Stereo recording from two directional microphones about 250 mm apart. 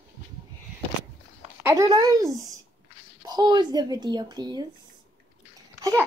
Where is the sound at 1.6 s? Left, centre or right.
Centre.